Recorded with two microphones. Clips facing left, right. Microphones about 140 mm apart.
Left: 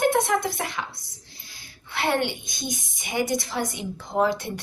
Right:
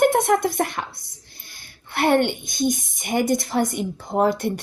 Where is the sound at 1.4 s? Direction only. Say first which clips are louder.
Right 3 dB; 55° right (ahead or behind).